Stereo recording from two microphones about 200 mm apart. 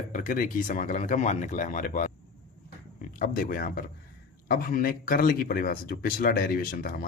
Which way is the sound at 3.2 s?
45° left (ahead or behind).